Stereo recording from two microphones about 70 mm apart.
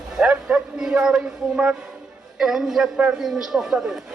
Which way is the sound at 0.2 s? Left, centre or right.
Centre.